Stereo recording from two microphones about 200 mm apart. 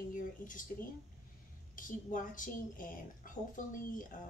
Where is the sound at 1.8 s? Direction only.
40° left (ahead or behind).